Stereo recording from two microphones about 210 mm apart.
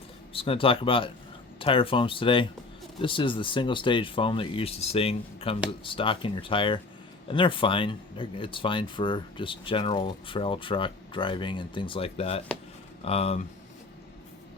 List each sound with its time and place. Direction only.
0.3 s speech: 25° left (ahead or behind)